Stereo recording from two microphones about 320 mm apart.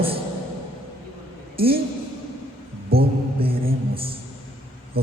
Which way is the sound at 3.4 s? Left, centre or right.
Centre.